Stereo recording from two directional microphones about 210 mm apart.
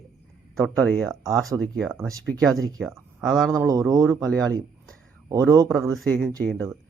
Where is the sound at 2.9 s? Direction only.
10° right (ahead or behind).